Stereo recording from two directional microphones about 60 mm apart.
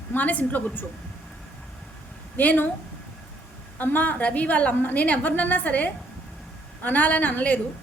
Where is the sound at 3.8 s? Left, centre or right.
Left.